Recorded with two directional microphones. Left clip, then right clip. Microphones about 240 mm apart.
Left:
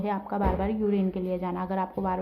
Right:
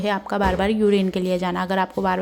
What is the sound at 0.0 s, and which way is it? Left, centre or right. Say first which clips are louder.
A woman's voice: right 7 dB; right.